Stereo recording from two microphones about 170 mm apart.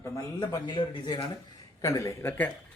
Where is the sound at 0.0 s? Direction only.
20° left (ahead or behind).